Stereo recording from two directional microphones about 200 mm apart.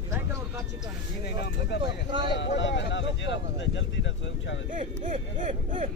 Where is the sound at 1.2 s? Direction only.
55° left (ahead or behind).